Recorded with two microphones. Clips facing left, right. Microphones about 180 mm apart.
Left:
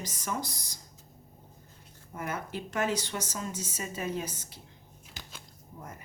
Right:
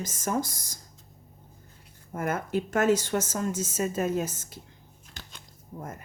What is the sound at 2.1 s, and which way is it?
Speech, 50° right (ahead or behind).